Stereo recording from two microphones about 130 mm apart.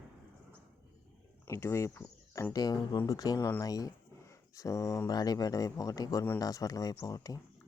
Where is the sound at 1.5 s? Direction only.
20° left (ahead or behind).